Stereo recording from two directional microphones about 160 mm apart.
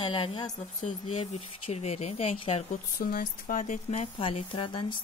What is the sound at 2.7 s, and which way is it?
Speech, 65° left (ahead or behind).